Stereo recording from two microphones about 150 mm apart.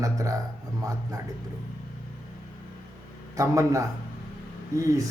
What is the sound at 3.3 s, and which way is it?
A man's voice, 20° right (ahead or behind).